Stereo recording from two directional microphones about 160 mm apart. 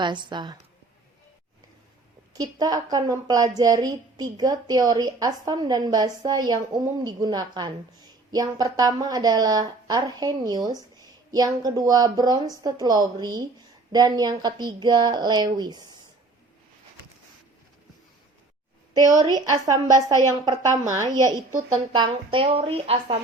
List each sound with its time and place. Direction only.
0.0 s a woman's voice: 30° right (ahead or behind)
2.4 s a woman's voice: 25° right (ahead or behind)
18.9 s a woman's voice: 25° right (ahead or behind)
21.9 s speech: 30° right (ahead or behind)